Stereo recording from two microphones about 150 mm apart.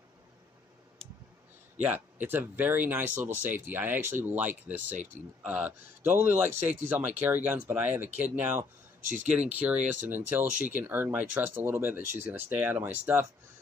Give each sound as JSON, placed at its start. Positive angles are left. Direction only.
{"t": 1.8, "sound": "speech", "side_deg": -10}
{"t": 9.0, "sound": "speech", "side_deg": -60}
{"t": 9.3, "sound": "speech", "side_deg": -10}